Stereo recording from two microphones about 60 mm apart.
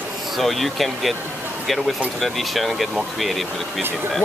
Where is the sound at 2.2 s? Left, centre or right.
Centre.